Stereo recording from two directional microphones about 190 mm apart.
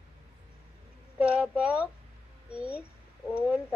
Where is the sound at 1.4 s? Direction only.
5° right (ahead or behind).